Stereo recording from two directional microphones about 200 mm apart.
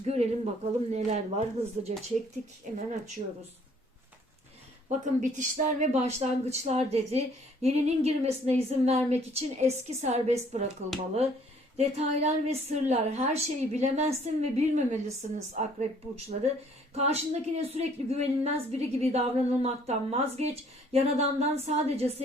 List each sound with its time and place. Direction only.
0.1 s a woman's voice: 35° right (ahead or behind)
4.9 s a woman's voice: 40° right (ahead or behind)
11.8 s a woman's voice: 30° right (ahead or behind)